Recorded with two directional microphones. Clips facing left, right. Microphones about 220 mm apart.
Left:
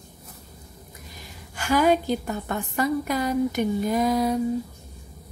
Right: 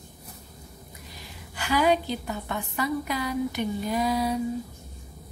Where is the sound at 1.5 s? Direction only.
45° left (ahead or behind).